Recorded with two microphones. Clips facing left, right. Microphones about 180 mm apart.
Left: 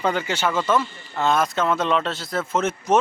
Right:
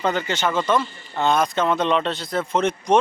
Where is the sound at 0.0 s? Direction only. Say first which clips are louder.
Even; 10° left (ahead or behind).